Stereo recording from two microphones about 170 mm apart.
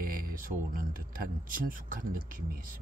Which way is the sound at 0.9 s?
55° right (ahead or behind).